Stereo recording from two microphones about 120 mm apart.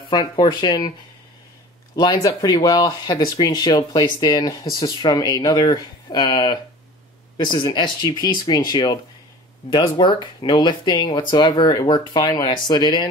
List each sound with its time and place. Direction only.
0.1 s speech: 40° left (ahead or behind)
2.0 s speech: 35° left (ahead or behind)